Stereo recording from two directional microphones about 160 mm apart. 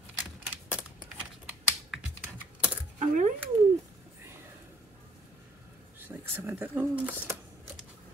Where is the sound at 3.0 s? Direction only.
50° right (ahead or behind).